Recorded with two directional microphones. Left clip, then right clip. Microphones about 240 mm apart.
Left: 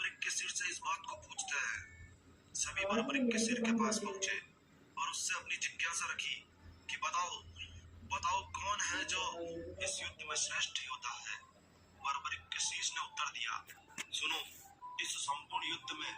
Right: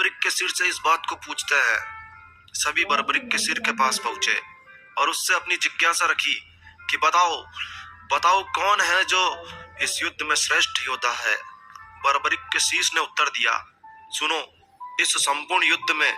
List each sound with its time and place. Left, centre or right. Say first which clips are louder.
0.0 s speech: right 17 dB; right